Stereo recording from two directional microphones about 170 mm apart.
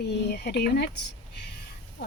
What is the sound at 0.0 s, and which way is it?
Speech, 75° left (ahead or behind).